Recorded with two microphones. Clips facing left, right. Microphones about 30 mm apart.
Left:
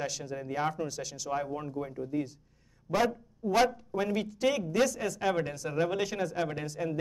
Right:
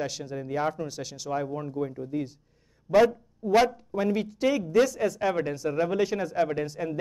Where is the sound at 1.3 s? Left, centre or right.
Centre.